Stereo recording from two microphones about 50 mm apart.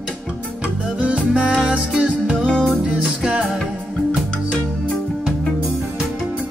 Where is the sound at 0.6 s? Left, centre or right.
Right.